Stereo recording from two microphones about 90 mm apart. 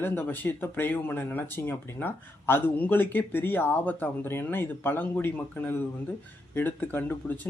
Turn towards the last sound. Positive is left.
turn(degrees=20)  # may be behind; listen again after turning